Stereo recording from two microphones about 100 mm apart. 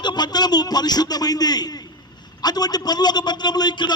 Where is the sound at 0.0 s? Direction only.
45° left (ahead or behind).